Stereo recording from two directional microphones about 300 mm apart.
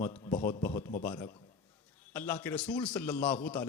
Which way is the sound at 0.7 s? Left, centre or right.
Left.